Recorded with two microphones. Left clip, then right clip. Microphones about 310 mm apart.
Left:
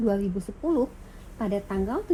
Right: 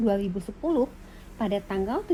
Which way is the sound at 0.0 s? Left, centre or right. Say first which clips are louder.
Even; right.